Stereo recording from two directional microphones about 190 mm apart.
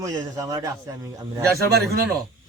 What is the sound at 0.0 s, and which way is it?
Speech, 20° right (ahead or behind).